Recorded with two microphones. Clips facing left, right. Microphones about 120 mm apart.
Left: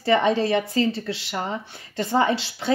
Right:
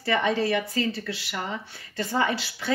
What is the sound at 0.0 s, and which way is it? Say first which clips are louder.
Speech: left 5 dB; 25° left (ahead or behind).